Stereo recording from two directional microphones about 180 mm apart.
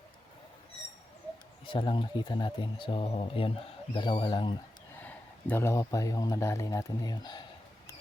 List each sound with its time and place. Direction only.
1.6 s speech: 25° left (ahead or behind)
4.9 s speech: 10° left (ahead or behind)